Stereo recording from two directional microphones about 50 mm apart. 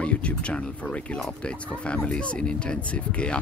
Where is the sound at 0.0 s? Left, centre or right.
Left.